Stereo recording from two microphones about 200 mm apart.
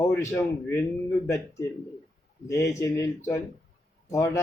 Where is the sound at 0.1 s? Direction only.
15° left (ahead or behind).